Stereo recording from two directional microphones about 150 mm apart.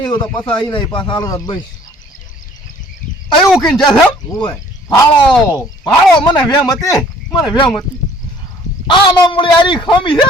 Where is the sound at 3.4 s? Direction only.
Centre (ahead or behind).